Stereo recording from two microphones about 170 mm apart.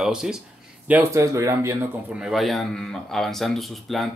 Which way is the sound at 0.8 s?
15° right (ahead or behind).